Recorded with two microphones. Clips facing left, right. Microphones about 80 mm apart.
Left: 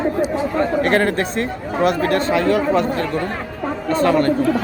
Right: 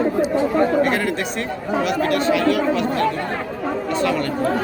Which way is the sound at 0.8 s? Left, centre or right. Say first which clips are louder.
Left 4 dB; left.